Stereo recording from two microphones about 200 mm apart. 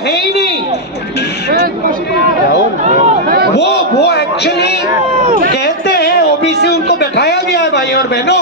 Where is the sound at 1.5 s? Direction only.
50° right (ahead or behind).